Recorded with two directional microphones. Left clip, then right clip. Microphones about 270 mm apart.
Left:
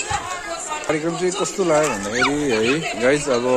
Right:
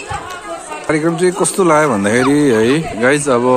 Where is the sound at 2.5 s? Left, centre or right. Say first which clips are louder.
Right 6 dB; centre.